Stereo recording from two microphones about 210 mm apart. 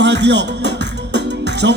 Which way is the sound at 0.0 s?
55° right (ahead or behind).